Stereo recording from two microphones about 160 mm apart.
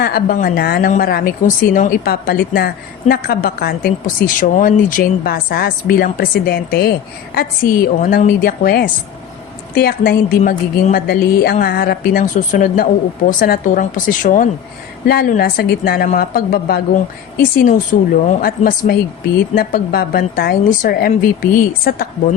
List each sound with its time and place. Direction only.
0.0 s a woman's voice: 70° left (ahead or behind)
11.6 s a woman's voice: 75° left (ahead or behind); by 14.5 s 55° left (ahead or behind)
15.0 s a woman's voice: 70° left (ahead or behind)
17.6 s a woman's voice: 55° left (ahead or behind)